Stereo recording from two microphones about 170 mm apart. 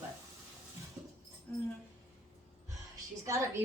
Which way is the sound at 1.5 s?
10° left (ahead or behind).